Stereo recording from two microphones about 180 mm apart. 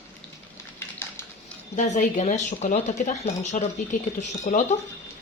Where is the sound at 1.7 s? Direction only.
45° left (ahead or behind).